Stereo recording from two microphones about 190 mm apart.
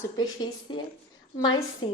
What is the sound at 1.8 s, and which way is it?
Speech, 25° left (ahead or behind).